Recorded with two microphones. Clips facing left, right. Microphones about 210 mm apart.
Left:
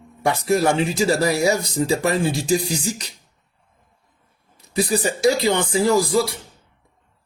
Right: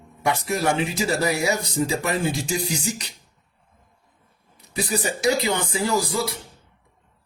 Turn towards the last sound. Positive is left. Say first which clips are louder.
# left 6 dB
turn(degrees=30)  # may be behind; listen again after turning